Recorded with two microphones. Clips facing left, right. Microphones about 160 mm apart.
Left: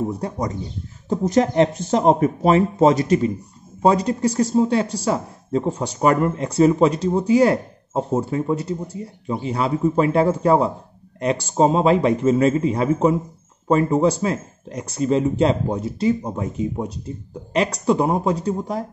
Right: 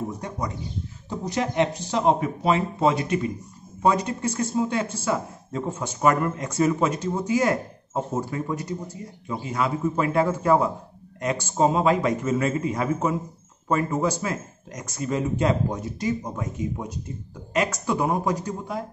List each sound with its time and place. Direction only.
1.0 s speech: 45° left (ahead or behind)
1.4 s a man's voice: 35° left (ahead or behind)